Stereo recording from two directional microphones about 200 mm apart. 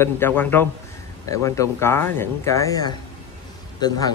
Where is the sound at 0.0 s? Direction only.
10° left (ahead or behind).